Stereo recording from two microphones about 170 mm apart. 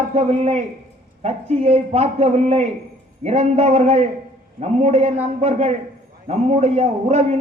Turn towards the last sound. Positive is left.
turn(degrees=-40)  # may be behind; listen again after turning